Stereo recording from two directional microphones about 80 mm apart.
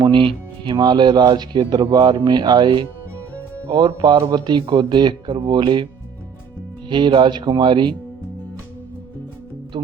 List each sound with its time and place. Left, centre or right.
0.0 s speech: right